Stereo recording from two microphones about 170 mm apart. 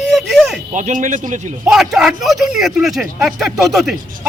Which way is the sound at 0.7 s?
45° right (ahead or behind).